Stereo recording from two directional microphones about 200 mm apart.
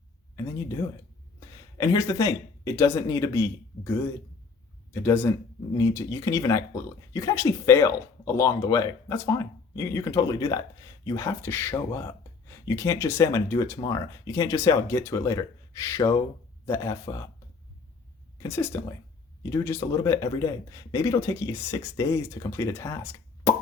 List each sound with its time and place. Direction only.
0.3 s speech: 15° left (ahead or behind)
18.4 s speech: 10° left (ahead or behind)